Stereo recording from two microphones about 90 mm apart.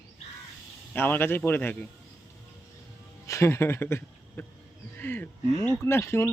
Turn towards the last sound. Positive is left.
turn(degrees=30)  # may be behind; listen again after turning